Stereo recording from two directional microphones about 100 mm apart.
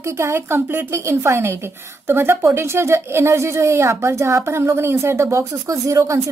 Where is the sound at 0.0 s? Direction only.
25° right (ahead or behind).